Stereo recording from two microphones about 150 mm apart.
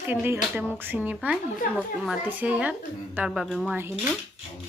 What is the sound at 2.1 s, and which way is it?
Speech, 10° right (ahead or behind).